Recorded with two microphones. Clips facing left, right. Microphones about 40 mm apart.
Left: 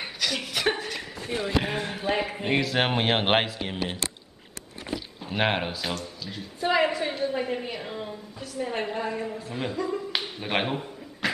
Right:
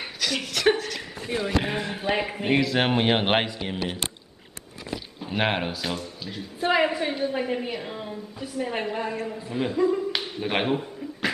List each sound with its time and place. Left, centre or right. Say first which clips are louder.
0.0 s a sound: right 1 dB; centre
0.7 s speech: right 2 dB; centre
1.2 s speech: right 2 dB; right
1.6 s a woman's voice: right 1 dB; centre
5.9 s a woman's voice: right 2 dB; centre
10.1 s finger snapping: right 1 dB; centre